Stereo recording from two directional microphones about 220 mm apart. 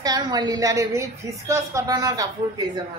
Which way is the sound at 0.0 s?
20° right (ahead or behind).